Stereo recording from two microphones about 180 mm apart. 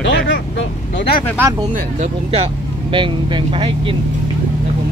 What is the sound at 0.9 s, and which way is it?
Speech, 70° left (ahead or behind).